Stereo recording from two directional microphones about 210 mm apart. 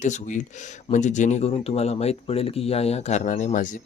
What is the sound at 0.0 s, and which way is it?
Speech, 35° left (ahead or behind).